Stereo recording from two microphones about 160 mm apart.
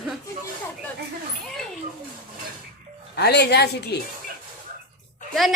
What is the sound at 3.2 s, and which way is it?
Speech, 90° left.